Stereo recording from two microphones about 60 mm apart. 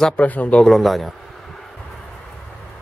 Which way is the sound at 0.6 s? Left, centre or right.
Centre.